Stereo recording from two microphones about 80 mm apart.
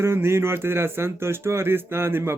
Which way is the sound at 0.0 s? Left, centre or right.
Right.